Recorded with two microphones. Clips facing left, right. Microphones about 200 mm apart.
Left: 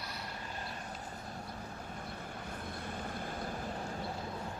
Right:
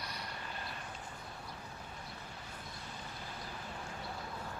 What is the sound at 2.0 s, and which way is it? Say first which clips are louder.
Vehicle: left 6 dB; 55° left (ahead or behind).